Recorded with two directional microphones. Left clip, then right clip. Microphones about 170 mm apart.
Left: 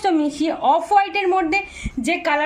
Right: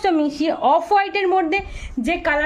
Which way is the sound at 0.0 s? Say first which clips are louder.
Even; 30° right (ahead or behind).